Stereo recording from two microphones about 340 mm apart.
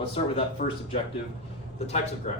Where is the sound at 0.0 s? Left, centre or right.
Centre.